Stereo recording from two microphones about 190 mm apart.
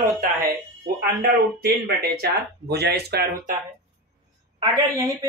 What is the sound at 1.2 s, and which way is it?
Speech, 55° right (ahead or behind).